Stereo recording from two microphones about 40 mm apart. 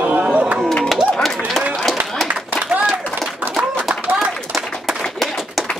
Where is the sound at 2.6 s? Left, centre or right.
Right.